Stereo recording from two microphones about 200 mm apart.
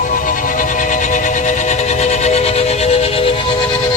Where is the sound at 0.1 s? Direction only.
40° left (ahead or behind).